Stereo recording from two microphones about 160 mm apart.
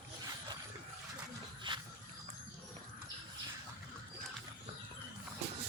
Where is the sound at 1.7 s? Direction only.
30° right (ahead or behind).